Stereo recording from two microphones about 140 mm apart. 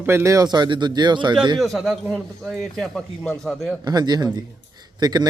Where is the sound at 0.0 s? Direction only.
20° right (ahead or behind).